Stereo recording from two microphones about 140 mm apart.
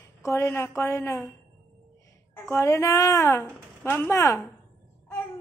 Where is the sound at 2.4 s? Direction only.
20° left (ahead or behind).